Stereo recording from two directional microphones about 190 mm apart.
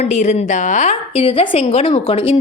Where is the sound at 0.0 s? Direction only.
35° left (ahead or behind).